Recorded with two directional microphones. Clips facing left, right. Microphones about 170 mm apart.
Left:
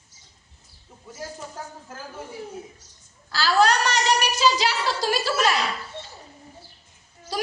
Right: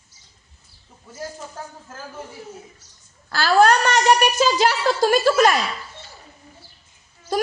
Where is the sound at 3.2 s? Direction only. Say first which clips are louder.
Right 4 dB; 55° right (ahead or behind).